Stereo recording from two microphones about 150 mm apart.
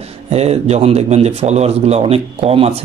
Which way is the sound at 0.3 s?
45° right (ahead or behind).